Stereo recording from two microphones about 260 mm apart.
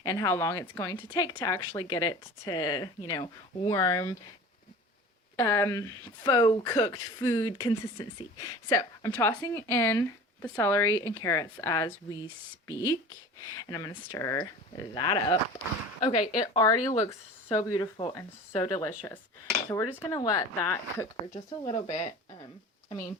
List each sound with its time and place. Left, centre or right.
0.0 s a woman's voice: centre
5.4 s a woman's voice: centre
21.7 s speech: left